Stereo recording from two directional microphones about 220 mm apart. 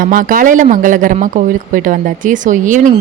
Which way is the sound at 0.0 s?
40° right (ahead or behind).